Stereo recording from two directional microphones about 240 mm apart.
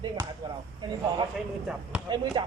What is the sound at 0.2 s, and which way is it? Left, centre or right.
Basketball bounce, centre.